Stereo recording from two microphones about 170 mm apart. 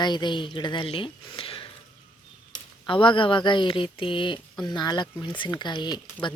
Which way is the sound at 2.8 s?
30° left (ahead or behind).